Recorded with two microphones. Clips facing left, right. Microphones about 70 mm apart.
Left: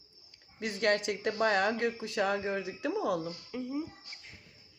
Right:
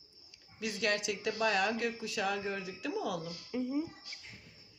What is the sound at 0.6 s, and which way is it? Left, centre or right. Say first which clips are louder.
Speech: left 4 dB; left.